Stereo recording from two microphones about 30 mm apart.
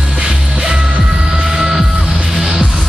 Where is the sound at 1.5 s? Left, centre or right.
Centre.